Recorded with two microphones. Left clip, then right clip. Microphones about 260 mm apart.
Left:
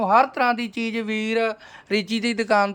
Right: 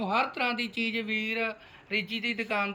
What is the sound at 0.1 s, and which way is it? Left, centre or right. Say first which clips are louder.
Speech: left 10 dB; centre.